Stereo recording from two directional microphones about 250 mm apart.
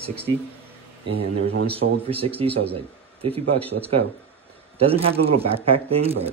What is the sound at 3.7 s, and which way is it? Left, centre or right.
Speech, right.